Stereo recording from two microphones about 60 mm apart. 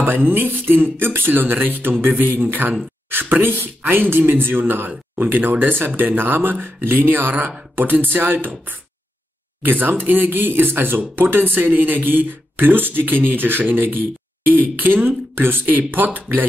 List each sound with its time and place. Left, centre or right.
0.0 s speech: right